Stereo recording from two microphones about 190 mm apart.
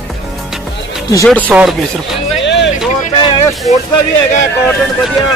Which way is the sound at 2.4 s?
70° left (ahead or behind).